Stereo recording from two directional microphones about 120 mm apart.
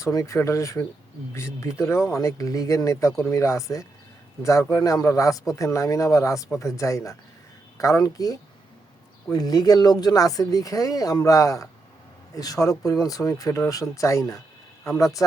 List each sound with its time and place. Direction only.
0.0 s speech: 25° left (ahead or behind)